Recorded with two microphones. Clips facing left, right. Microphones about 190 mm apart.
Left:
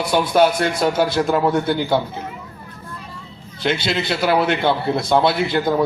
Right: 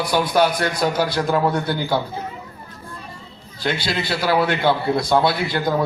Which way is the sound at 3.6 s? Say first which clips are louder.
Left 3 dB; 25° left (ahead or behind).